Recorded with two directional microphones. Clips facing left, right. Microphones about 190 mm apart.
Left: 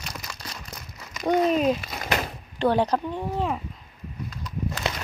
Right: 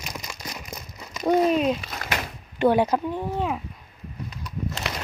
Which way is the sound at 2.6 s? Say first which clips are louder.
Right 2 dB; 10° right (ahead or behind).